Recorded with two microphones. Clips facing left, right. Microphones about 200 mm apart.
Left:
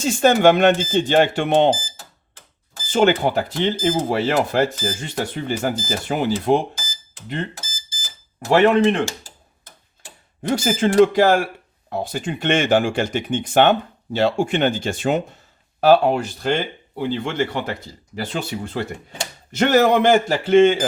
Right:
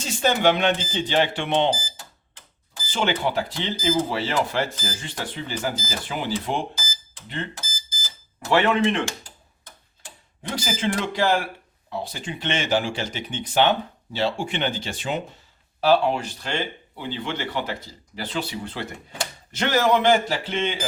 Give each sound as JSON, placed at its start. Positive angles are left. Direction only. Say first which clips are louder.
{"t": 0.0, "sound": "speech", "louder": "left 6 dB", "side_deg": 50}
{"t": 2.9, "sound": "speech", "louder": "left 7 dB", "side_deg": 45}
{"t": 8.4, "sound": "speech", "louder": "left 5 dB", "side_deg": 40}
{"t": 10.5, "sound": "speech", "louder": "left 8 dB", "side_deg": 45}